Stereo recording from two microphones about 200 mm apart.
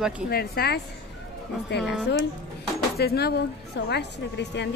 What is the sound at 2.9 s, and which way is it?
A woman's voice, 50° left (ahead or behind).